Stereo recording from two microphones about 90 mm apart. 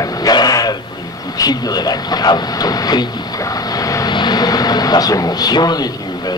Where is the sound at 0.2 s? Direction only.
45° left (ahead or behind).